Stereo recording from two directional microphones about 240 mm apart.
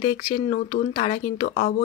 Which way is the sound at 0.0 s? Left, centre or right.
Left.